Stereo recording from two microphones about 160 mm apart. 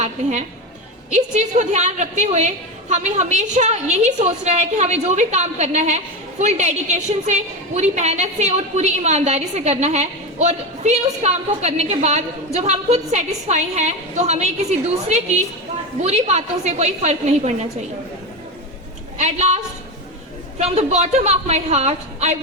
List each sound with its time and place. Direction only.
0.0 s a woman's voice: 45° right (ahead or behind)
19.1 s a woman's voice: 45° right (ahead or behind)
20.6 s a woman's voice: 40° right (ahead or behind)